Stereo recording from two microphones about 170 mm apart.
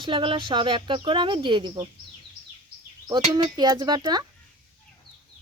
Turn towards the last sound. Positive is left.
turn(degrees=-25)  # may be behind; listen again after turning